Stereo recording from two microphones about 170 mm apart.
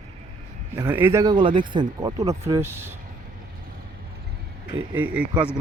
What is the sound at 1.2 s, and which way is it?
Speech, 25° right (ahead or behind).